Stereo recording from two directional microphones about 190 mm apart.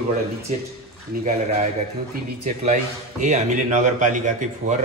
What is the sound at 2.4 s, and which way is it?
Speech, 40° right (ahead or behind).